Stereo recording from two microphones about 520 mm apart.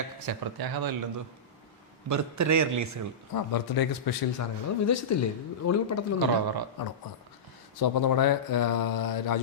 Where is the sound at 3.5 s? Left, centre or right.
Left.